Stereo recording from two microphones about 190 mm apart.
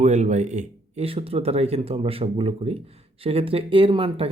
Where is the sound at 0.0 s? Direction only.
35° right (ahead or behind).